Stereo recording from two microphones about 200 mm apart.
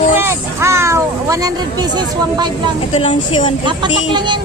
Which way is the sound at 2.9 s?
25° left (ahead or behind).